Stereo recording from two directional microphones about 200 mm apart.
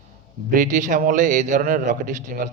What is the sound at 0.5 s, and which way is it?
A man's voice, 40° right (ahead or behind).